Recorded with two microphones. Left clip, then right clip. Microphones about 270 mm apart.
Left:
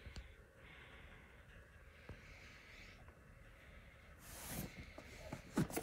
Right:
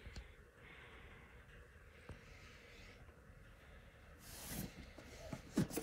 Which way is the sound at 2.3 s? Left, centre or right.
Centre.